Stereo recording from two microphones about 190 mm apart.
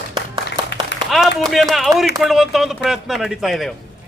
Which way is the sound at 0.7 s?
65° left (ahead or behind).